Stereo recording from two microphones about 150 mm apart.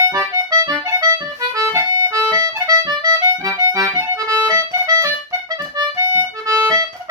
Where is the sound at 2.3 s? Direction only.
25° right (ahead or behind).